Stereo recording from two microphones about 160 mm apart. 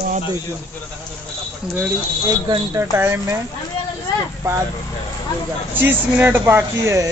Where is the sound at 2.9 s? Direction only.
15° right (ahead or behind).